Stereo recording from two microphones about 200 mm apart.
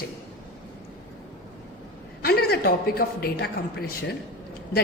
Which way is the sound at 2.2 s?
50° left (ahead or behind).